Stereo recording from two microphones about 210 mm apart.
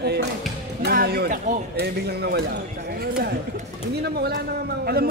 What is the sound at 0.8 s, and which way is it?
Speech, 50° right (ahead or behind).